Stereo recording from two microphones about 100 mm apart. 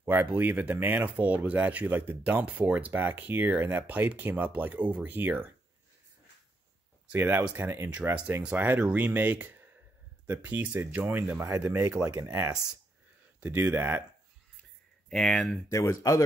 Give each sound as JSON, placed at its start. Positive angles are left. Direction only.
{"t": 0.0, "sound": "speech", "side_deg": -20}
{"t": 7.2, "sound": "speech", "side_deg": -20}
{"t": 11.4, "sound": "speech", "side_deg": -30}
{"t": 15.0, "sound": "speech", "side_deg": 5}
{"t": 15.7, "sound": "speech", "side_deg": 35}